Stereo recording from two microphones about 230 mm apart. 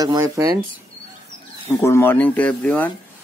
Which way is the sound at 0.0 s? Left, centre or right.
Centre.